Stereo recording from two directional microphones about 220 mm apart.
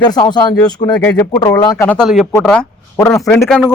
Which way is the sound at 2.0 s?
Centre (ahead or behind).